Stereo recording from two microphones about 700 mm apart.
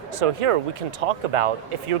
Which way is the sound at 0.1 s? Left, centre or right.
Right.